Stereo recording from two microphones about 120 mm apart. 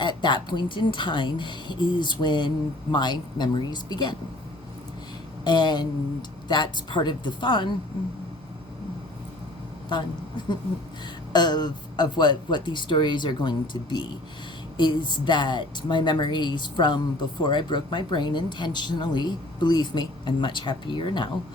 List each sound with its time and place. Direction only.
0.0 s speech: 40° left (ahead or behind)
5.5 s speech: 40° left (ahead or behind)
9.9 s speech: 40° left (ahead or behind)